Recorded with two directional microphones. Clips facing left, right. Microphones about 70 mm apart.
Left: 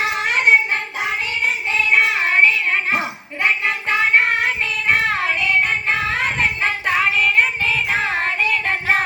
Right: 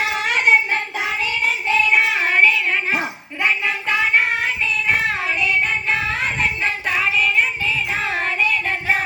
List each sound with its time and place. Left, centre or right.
0.0 s child singing: left
3.4 s music: left
5.1 s child singing: left